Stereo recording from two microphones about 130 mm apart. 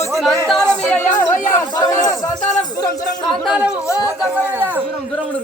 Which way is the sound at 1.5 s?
25° left (ahead or behind).